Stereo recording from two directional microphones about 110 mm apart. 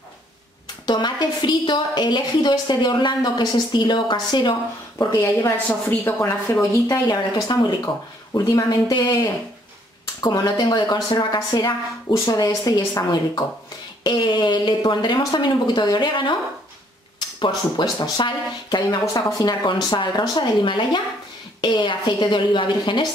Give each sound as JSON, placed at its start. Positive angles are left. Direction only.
{"t": 0.8, "sound": "a woman's voice", "side_deg": 40}
{"t": 4.9, "sound": "a woman's voice", "side_deg": 25}
{"t": 6.9, "sound": "speech", "side_deg": 35}
{"t": 12.1, "sound": "a woman's voice", "side_deg": 30}
{"t": 17.4, "sound": "a woman's voice", "side_deg": 40}
{"t": 18.9, "sound": "a woman's voice", "side_deg": 35}